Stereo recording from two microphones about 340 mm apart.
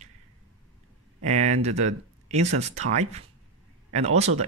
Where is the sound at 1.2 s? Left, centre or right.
Centre.